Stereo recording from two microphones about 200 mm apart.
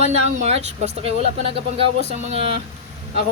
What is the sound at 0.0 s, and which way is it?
Speech, 30° right (ahead or behind).